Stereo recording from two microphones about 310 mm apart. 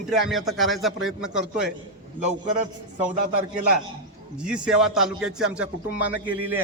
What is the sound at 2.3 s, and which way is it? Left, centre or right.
Speech, right.